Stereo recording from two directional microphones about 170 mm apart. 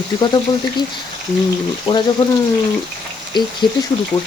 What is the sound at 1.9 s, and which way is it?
Speech, 25° left (ahead or behind).